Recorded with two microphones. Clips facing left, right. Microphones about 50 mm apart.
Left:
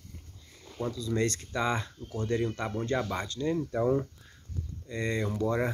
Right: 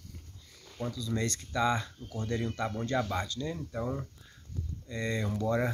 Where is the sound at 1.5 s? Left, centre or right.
Left.